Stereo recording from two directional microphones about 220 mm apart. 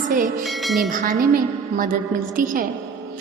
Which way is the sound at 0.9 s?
40° right (ahead or behind).